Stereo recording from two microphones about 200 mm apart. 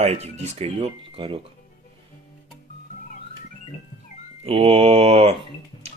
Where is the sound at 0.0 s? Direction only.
35° right (ahead or behind).